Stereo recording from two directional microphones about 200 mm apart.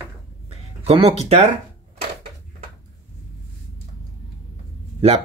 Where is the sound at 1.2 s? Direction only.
30° right (ahead or behind).